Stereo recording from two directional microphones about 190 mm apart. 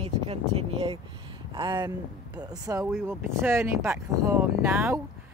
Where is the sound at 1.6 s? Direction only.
25° right (ahead or behind).